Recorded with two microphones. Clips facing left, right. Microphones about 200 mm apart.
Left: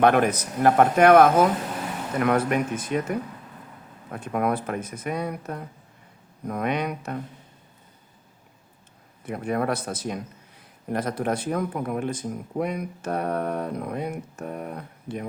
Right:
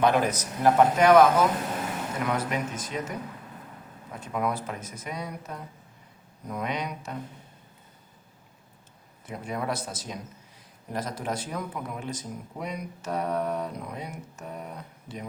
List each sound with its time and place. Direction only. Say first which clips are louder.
0.0 s speech: left 4 dB; 60° left (ahead or behind)
9.2 s speech: left 6 dB; 60° left (ahead or behind)